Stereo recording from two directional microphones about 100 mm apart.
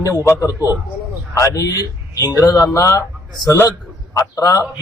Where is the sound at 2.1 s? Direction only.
35° left (ahead or behind).